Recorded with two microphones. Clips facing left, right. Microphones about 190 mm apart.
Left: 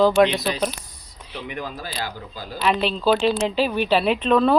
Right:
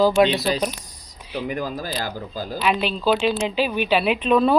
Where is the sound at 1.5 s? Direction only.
40° right (ahead or behind).